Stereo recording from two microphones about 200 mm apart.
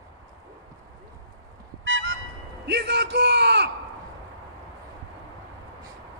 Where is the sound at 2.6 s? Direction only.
55° right (ahead or behind).